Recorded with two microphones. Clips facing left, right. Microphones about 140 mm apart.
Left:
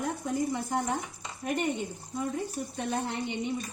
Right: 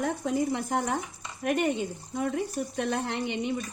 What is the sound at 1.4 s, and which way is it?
Speech, 75° right (ahead or behind).